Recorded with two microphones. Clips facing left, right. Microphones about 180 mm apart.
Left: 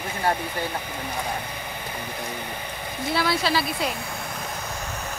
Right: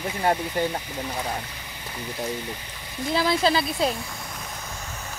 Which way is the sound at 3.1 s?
20° right (ahead or behind).